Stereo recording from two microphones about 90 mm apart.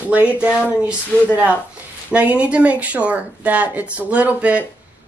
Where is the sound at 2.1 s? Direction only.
15° right (ahead or behind).